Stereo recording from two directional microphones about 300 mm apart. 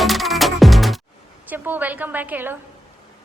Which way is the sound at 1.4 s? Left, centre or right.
Centre.